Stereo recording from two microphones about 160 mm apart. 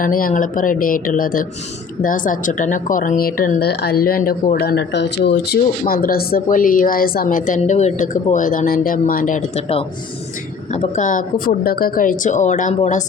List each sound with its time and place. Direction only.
0.0 s a woman's voice: 60° left (ahead or behind)
4.5 s speech: 85° left
5.9 s a woman's voice: 65° left (ahead or behind)
10.8 s a woman's voice: 50° left (ahead or behind)